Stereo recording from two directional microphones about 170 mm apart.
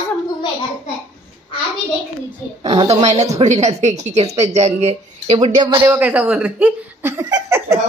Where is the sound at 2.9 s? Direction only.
40° right (ahead or behind).